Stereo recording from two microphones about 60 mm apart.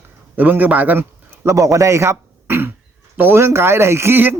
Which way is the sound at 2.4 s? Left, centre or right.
Right.